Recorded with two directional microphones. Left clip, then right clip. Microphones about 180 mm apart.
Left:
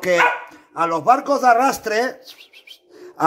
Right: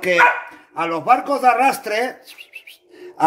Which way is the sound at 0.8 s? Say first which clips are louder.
Even; 30° left (ahead or behind).